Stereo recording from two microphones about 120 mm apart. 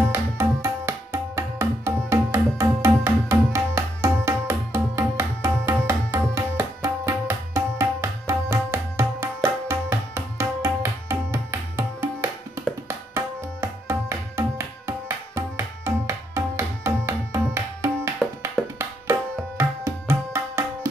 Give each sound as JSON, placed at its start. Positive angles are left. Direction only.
{"t": 0.1, "sound": "tabla", "side_deg": -20}